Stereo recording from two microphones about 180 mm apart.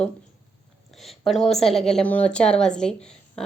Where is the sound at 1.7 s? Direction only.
Centre (ahead or behind).